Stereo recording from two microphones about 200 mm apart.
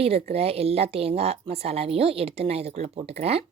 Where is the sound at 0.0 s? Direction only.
30° right (ahead or behind).